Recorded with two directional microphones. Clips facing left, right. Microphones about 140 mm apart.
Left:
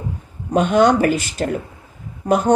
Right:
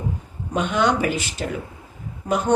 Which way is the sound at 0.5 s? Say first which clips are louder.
Left 7 dB; 45° left (ahead or behind).